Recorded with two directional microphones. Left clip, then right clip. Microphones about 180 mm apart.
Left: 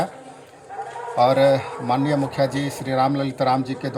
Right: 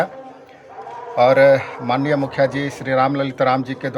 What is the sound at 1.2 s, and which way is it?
Speech, 5° right (ahead or behind).